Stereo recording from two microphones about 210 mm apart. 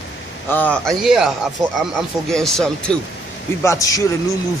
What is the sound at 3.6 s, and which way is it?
Speech, 15° left (ahead or behind).